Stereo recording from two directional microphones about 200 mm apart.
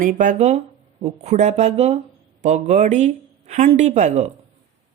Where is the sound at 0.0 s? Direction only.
40° right (ahead or behind).